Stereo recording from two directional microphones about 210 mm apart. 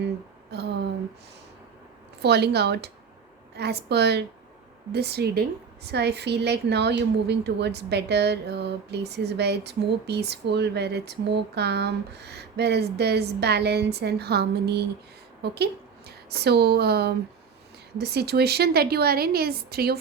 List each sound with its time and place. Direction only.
0.5 s a woman's voice: 55° right (ahead or behind)
2.2 s a woman's voice: 50° right (ahead or behind)